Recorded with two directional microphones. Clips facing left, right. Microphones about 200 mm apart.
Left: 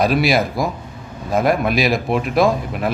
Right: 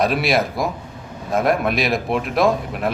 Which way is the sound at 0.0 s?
Centre (ahead or behind).